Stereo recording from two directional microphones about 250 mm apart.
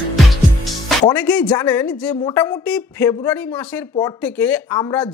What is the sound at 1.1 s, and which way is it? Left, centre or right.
A woman's voice, centre.